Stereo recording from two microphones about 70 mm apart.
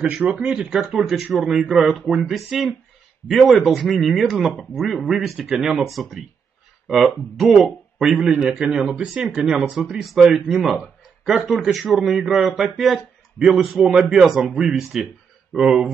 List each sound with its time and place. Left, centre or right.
0.0 s speech: centre